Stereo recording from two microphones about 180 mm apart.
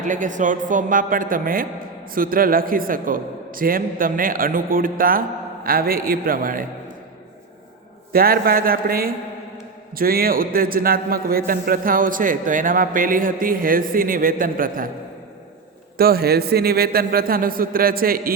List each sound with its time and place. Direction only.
0.0 s a man's voice: 45° right (ahead or behind)
8.1 s a man's voice: 55° right (ahead or behind)
16.0 s a man's voice: 55° right (ahead or behind)